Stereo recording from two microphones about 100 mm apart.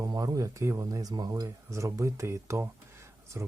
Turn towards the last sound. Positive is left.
turn(degrees=-30)  # may be behind; listen again after turning